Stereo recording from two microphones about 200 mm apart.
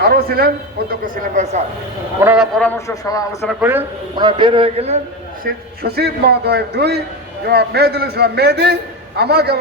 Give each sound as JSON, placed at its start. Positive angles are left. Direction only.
{"t": 0.0, "sound": "a man's voice", "side_deg": -50}
{"t": 2.2, "sound": "a man's voice", "side_deg": -5}
{"t": 2.6, "sound": "a man's voice", "side_deg": 10}
{"t": 3.4, "sound": "speech", "side_deg": -5}
{"t": 4.1, "sound": "a man's voice", "side_deg": -20}
{"t": 5.4, "sound": "a man's voice", "side_deg": -50}